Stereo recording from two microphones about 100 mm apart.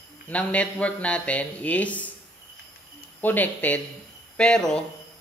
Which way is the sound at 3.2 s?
15° left (ahead or behind).